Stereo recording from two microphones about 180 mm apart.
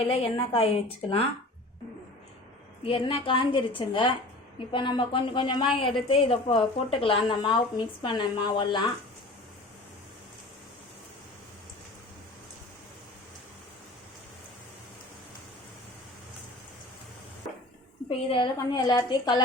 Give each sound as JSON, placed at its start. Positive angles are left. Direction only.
{"t": 0.0, "sound": "a woman's voice", "side_deg": 30}
{"t": 2.8, "sound": "speech", "side_deg": 30}
{"t": 18.3, "sound": "speech", "side_deg": 25}